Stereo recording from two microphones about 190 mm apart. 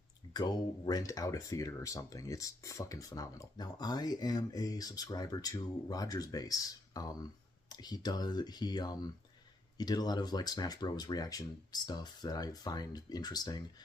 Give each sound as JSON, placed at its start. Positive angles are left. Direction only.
{"t": 0.3, "sound": "speech", "side_deg": 20}